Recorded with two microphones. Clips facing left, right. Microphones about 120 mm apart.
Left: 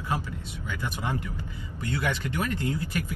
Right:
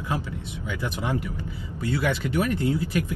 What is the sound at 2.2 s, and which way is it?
Speech, 15° right (ahead or behind).